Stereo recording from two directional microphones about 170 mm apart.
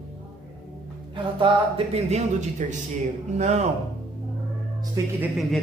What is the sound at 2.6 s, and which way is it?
Speech, 45° right (ahead or behind).